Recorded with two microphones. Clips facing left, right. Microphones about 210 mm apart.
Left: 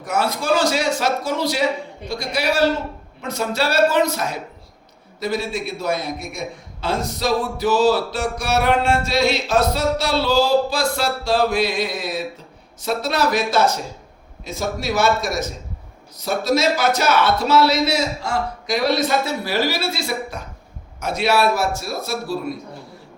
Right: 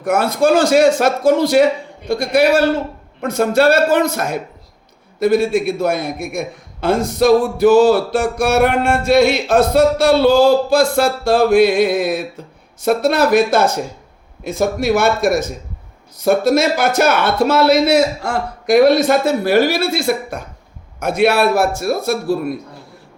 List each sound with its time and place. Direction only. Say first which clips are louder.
0.0 s a man's voice: right 8 dB; 55° right (ahead or behind)